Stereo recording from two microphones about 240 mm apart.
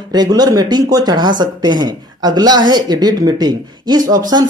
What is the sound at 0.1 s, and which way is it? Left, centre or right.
Speech, centre.